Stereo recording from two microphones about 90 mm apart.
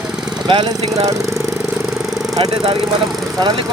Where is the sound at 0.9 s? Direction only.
40° right (ahead or behind).